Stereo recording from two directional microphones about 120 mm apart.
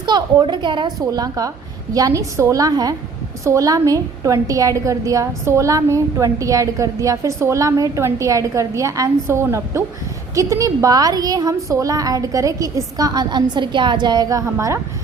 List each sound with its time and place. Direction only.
0.0 s a woman's voice: 40° right (ahead or behind)